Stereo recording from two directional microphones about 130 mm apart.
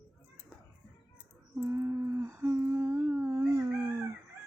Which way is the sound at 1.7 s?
20° right (ahead or behind).